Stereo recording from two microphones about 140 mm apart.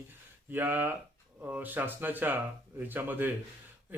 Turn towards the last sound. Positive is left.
turn(degrees=-15)  # may be behind; listen again after turning